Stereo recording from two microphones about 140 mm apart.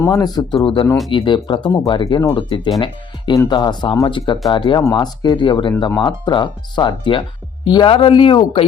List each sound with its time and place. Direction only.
0.0 s speech: 30° left (ahead or behind)